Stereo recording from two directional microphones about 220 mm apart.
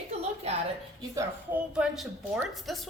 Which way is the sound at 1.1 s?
10° right (ahead or behind).